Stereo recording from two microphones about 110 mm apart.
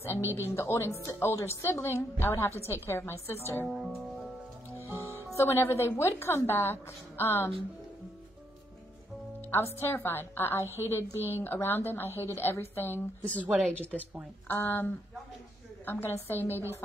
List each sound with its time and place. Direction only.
0.2 s speech: 20° right (ahead or behind)
0.6 s a woman's voice: 25° left (ahead or behind)
3.6 s speech: 5° right (ahead or behind)
5.3 s a woman's voice: 20° left (ahead or behind)
9.4 s music: 20° left (ahead or behind)
9.8 s a woman's voice: 20° left (ahead or behind)
13.4 s a woman's voice: 15° right (ahead or behind)
13.7 s a woman's voice: 15° left (ahead or behind)